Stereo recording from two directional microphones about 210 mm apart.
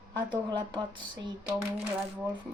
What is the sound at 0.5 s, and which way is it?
Speech, 20° right (ahead or behind).